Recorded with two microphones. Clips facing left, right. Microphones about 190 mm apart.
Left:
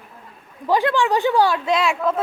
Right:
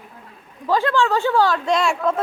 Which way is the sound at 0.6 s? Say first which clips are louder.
Even; 15° left (ahead or behind).